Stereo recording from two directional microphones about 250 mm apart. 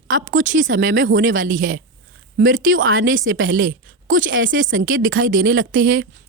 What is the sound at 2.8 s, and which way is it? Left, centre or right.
Speech, right.